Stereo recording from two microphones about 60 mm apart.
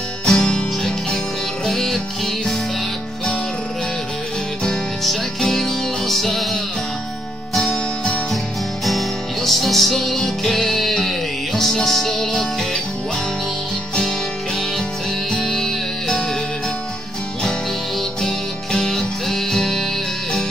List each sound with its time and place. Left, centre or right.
0.2 s music: centre
5.0 s music: centre
7.6 s music: centre
8.8 s music: centre
15.3 s music: centre
18.2 s music: centre